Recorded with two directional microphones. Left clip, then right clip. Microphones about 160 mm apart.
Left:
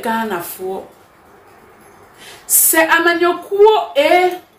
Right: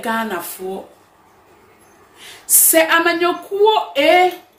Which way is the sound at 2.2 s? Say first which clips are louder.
Even; 10° right (ahead or behind).